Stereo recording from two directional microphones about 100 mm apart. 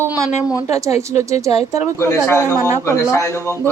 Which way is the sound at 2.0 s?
25° left (ahead or behind).